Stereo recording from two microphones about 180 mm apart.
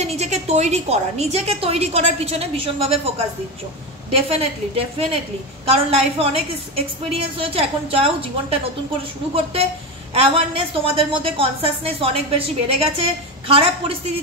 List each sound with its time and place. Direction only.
0.0 s a woman's voice: 35° right (ahead or behind)
4.1 s a woman's voice: 35° right (ahead or behind)